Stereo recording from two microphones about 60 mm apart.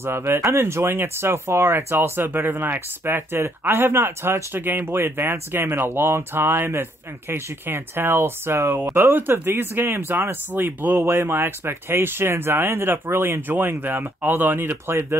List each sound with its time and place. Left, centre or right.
0.0 s speech: right